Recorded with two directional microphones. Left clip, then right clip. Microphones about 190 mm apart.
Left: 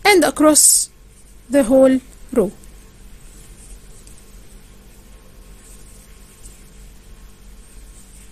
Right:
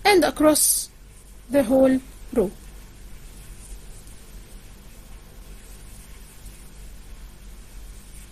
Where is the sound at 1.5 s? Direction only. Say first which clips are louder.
Left 6 dB; 40° left (ahead or behind).